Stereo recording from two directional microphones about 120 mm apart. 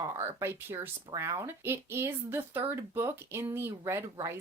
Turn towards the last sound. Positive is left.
turn(degrees=-25)  # may be behind; listen again after turning